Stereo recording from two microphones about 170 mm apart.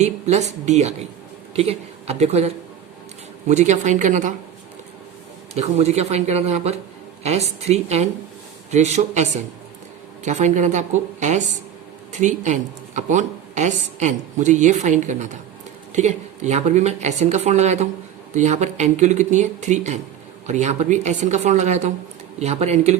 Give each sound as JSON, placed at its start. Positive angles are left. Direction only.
{"t": 0.0, "sound": "a woman's voice", "side_deg": -40}
{"t": 5.5, "sound": "a woman's voice", "side_deg": -40}